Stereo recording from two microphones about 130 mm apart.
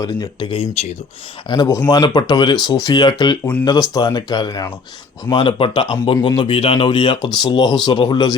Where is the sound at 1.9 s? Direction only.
35° left (ahead or behind).